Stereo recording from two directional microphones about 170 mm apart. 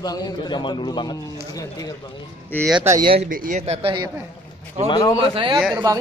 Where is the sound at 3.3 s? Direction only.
55° right (ahead or behind).